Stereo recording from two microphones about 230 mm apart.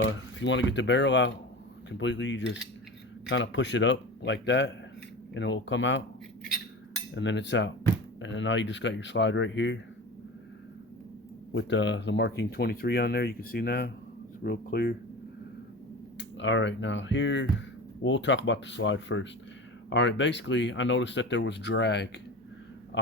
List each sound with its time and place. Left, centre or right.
0.0 s speech: left
7.1 s speech: left
11.5 s speech: left
16.1 s speech: left